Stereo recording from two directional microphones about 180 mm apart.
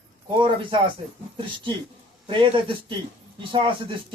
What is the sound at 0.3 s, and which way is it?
A man's voice, 30° right (ahead or behind).